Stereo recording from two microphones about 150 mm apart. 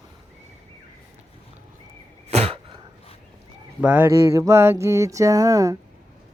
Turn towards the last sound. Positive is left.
turn(degrees=-20)  # may be behind; listen again after turning